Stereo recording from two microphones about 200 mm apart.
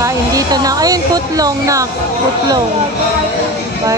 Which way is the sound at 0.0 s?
15° right (ahead or behind).